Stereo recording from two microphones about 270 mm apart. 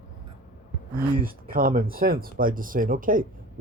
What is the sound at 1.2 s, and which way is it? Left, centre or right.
Speech, right.